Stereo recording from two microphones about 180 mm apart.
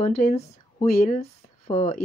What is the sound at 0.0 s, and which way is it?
Speech, 40° left (ahead or behind).